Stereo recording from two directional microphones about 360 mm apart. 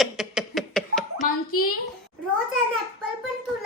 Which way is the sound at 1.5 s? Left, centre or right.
Left.